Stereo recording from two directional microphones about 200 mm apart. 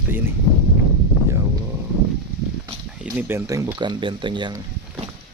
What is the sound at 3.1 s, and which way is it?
Speech, 15° right (ahead or behind).